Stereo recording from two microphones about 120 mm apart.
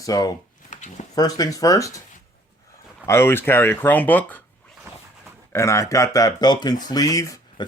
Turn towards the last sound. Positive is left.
turn(degrees=30)  # may be behind; listen again after turning